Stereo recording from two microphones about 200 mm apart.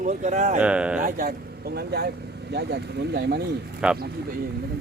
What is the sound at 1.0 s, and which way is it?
Speech, 45° right (ahead or behind).